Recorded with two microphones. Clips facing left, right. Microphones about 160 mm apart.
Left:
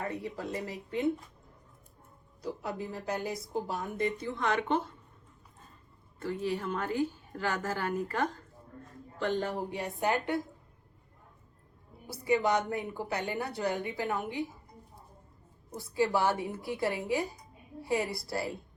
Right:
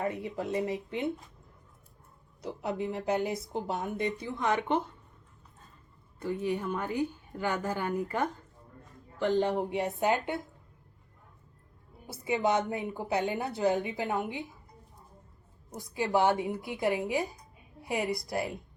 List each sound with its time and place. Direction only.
0.0 s a woman's voice: 20° right (ahead or behind)
2.4 s a woman's voice: 25° right (ahead or behind)
6.1 s a woman's voice: 15° right (ahead or behind)
12.1 s a woman's voice: 20° right (ahead or behind)
15.7 s a woman's voice: 20° right (ahead or behind)